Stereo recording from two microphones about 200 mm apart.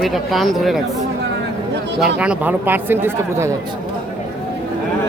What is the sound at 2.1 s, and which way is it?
Speech, 5° right (ahead or behind).